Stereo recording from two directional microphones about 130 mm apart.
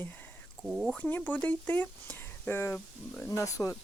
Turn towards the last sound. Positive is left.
turn(degrees=25)  # may be behind; listen again after turning